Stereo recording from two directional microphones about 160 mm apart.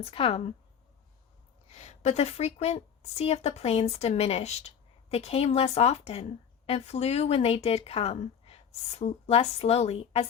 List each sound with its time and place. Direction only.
0.0 s speech: 35° left (ahead or behind)
1.7 s a woman's voice: 45° left (ahead or behind)